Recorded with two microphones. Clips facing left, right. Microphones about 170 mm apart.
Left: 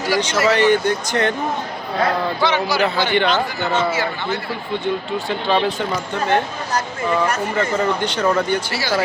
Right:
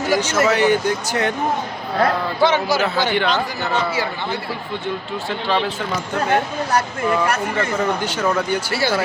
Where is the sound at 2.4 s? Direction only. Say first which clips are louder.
Right 4 dB; 45° right (ahead or behind).